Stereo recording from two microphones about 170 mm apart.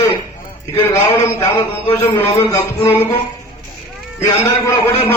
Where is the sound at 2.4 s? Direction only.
15° left (ahead or behind).